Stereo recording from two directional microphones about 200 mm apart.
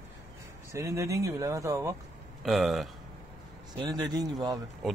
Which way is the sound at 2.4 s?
Centre (ahead or behind).